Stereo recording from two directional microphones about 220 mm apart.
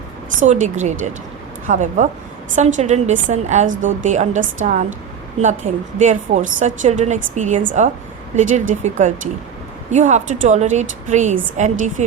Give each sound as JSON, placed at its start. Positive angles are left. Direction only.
{"t": 0.3, "sound": "a woman's voice", "side_deg": -30}